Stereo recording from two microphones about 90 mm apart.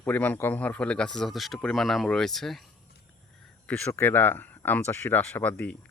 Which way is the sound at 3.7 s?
25° left (ahead or behind).